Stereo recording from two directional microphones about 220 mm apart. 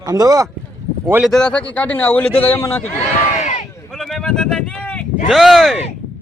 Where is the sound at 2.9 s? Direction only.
30° left (ahead or behind).